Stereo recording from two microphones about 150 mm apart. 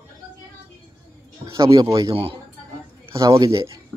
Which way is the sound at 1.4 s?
25° right (ahead or behind).